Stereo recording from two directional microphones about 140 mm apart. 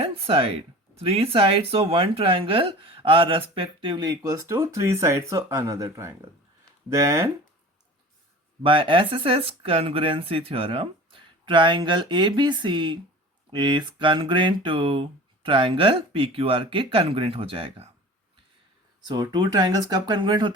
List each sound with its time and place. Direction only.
0.0 s speech: 45° right (ahead or behind); by 7.3 s 20° right (ahead or behind)
8.6 s speech: 40° right (ahead or behind)
19.0 s speech: 30° right (ahead or behind)